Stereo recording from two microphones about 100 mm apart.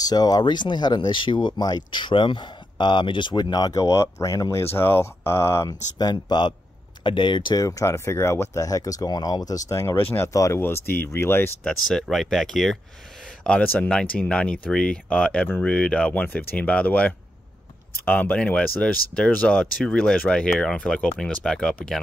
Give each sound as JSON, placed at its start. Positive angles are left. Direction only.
{"t": 0.0, "sound": "speech", "side_deg": 40}
{"t": 5.9, "sound": "speech", "side_deg": 45}
{"t": 7.6, "sound": "speech", "side_deg": 30}
{"t": 11.6, "sound": "speech", "side_deg": 5}
{"t": 13.4, "sound": "speech", "side_deg": 15}